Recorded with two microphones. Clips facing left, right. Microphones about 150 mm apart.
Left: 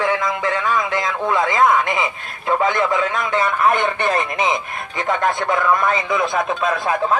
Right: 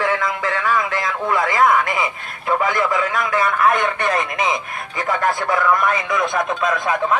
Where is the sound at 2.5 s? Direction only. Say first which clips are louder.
Left 1 dB; 20° left (ahead or behind).